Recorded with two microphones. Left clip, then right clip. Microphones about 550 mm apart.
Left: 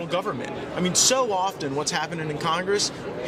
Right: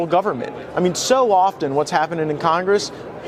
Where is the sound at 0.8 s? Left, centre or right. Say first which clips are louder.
Right 5 dB; right.